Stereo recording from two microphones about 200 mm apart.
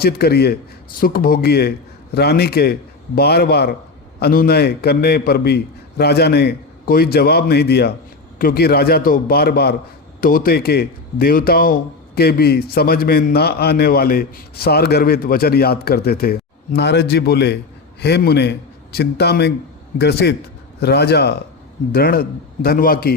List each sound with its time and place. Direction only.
0.0 s a man's voice: 50° left (ahead or behind)